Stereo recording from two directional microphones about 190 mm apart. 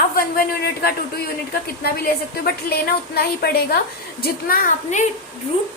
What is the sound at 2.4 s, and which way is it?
A woman's voice, 55° left (ahead or behind).